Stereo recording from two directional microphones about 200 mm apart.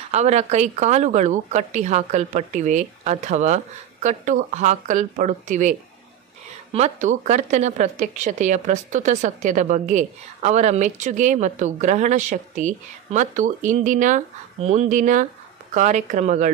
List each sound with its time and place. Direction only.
0.1 s a woman's voice: 35° right (ahead or behind)